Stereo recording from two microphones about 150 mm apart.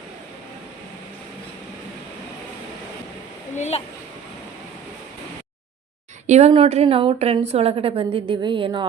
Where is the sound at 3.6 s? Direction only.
50° left (ahead or behind).